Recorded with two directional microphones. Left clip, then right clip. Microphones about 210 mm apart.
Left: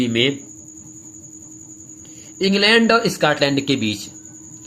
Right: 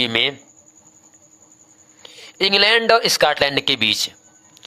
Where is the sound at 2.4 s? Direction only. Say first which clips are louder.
Even; 45° right (ahead or behind).